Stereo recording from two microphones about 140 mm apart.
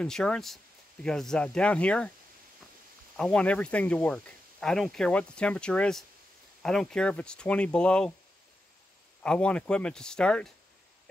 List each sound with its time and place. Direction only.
0.0 s speech: 5° left (ahead or behind)
3.2 s speech: 5° left (ahead or behind)
9.2 s speech: 5° left (ahead or behind)